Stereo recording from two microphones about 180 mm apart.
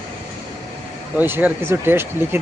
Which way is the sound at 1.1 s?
10° right (ahead or behind).